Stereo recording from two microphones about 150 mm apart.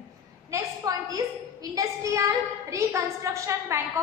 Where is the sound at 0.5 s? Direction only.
25° right (ahead or behind).